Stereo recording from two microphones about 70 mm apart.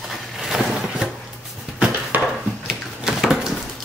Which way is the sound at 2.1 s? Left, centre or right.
Right.